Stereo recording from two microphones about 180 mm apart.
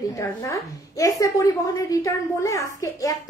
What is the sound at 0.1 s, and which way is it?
A woman's voice, 20° left (ahead or behind).